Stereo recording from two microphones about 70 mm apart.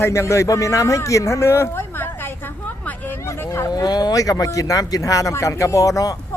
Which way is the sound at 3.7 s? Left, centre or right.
Left.